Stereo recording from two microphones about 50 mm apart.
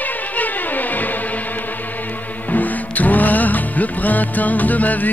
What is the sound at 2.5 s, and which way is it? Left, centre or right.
Music, left.